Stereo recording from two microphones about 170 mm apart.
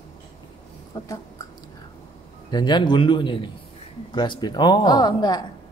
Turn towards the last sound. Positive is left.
turn(degrees=25)  # may be behind; listen again after turning